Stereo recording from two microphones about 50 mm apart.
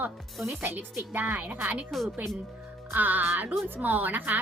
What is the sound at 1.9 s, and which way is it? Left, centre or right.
Speech, centre.